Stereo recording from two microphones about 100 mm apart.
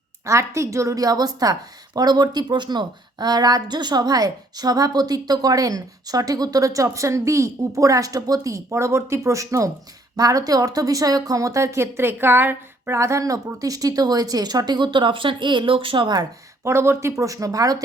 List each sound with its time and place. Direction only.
0.3 s speech: 30° right (ahead or behind); by 16.1 s 60° right (ahead or behind)
16.6 s speech: 25° right (ahead or behind)